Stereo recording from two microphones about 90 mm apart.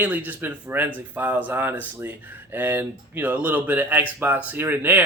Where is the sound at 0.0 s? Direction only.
20° right (ahead or behind).